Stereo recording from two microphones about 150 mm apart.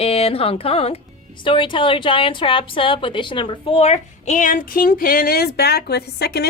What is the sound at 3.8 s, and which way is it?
Speech, 50° left (ahead or behind).